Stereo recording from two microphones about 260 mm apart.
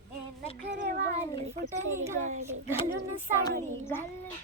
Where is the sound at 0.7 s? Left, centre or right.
Right.